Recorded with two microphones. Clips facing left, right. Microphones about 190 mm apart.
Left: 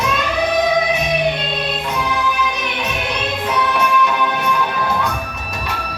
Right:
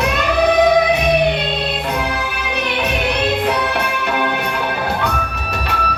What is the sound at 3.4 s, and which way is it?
Music, 65° right (ahead or behind).